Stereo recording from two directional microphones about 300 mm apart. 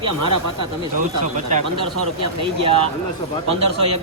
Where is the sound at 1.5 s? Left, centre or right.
Right.